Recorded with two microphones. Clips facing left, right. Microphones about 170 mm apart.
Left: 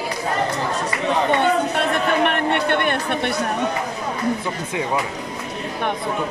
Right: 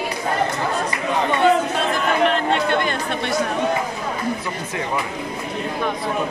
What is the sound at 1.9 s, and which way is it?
Chatter, 60° left (ahead or behind).